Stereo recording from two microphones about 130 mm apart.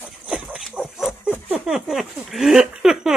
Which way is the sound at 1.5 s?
5° right (ahead or behind).